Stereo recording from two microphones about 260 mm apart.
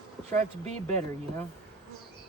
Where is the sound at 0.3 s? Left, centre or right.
Right.